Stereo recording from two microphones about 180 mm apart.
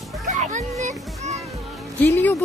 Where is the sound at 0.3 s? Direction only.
40° right (ahead or behind).